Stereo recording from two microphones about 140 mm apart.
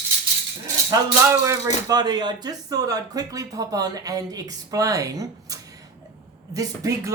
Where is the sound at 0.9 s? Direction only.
20° right (ahead or behind).